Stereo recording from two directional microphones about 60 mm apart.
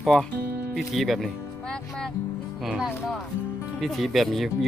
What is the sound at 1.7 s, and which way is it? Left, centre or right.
Music, centre.